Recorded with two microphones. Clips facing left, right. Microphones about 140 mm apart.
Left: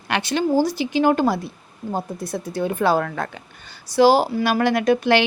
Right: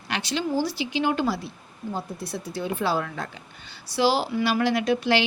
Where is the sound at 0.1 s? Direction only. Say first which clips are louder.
Left 6 dB; 55° left (ahead or behind).